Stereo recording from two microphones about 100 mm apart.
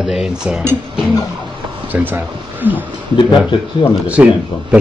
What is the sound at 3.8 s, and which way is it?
Speech, 45° left (ahead or behind).